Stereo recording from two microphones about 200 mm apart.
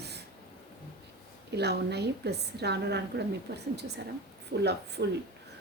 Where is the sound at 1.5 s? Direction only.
55° right (ahead or behind).